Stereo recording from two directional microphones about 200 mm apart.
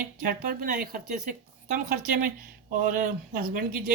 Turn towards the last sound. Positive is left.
turn(degrees=-45)  # may be behind; listen again after turning